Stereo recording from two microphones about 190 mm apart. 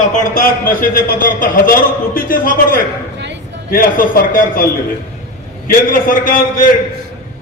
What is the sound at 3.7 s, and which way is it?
A man's voice, 45° left (ahead or behind).